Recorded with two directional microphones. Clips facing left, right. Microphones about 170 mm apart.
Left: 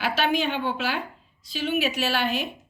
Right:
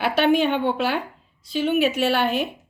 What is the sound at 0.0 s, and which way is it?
A woman's voice, 55° right (ahead or behind).